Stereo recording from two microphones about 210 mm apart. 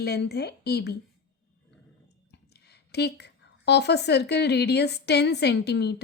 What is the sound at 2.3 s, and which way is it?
Speech, 50° left (ahead or behind).